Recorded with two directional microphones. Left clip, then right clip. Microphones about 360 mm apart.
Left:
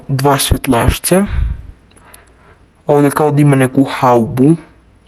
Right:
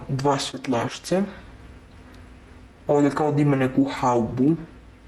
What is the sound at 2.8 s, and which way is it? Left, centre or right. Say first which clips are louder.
A man's voice: left 10 dB; left.